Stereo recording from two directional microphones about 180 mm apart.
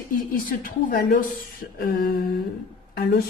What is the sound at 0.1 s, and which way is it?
A woman's voice, 50° left (ahead or behind).